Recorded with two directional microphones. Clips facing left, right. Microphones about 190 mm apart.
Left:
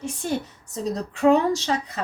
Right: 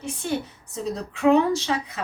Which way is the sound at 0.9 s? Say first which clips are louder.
Even; 40° left (ahead or behind).